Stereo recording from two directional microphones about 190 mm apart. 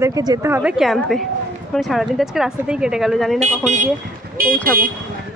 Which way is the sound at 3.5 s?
40° right (ahead or behind).